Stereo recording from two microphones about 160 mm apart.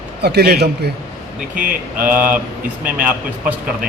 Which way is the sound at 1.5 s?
60° right (ahead or behind).